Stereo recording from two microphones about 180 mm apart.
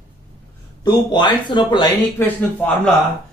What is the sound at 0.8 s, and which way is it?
Speech, 25° left (ahead or behind).